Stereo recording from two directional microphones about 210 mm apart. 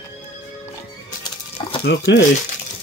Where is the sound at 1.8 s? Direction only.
55° left (ahead or behind).